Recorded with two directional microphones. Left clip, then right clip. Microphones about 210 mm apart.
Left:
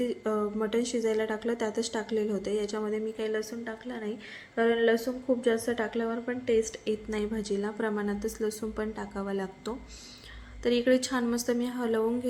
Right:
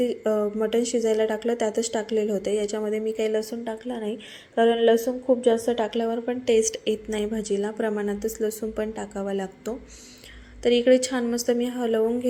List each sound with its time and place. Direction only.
0.0 s a woman's voice: 10° right (ahead or behind)
10.8 s a woman's voice: 5° right (ahead or behind)